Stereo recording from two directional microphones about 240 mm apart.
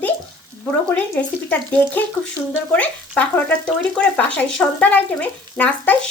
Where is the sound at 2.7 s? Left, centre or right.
Centre.